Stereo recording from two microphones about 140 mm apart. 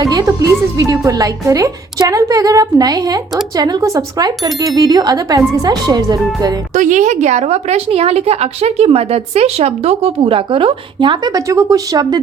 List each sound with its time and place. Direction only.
0.0 s a woman's voice: 25° right (ahead or behind)
6.7 s a woman's voice: 60° right (ahead or behind); by 12.2 s 25° right (ahead or behind)